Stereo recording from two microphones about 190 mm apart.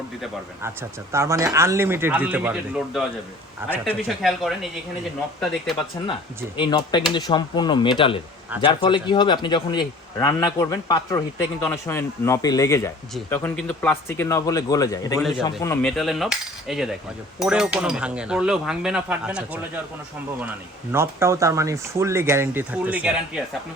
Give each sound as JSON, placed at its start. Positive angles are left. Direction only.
{"t": 0.6, "sound": "speech", "side_deg": -15}
{"t": 6.6, "sound": "a man's voice", "side_deg": 25}
{"t": 15.8, "sound": "speech", "side_deg": 0}
{"t": 20.9, "sound": "speech", "side_deg": -15}